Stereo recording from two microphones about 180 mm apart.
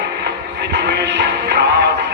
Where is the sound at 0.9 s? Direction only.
70° right (ahead or behind).